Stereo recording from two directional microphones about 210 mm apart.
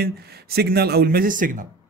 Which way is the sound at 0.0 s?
50° right (ahead or behind).